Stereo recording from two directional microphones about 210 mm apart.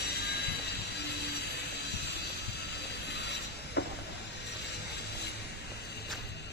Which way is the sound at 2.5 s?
50° left (ahead or behind).